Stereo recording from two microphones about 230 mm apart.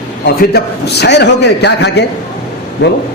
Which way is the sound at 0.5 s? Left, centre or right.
Left.